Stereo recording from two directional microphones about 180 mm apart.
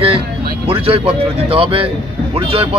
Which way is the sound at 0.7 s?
30° right (ahead or behind).